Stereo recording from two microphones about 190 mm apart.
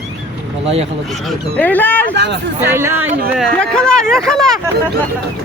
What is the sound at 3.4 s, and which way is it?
Speech, 5° left (ahead or behind).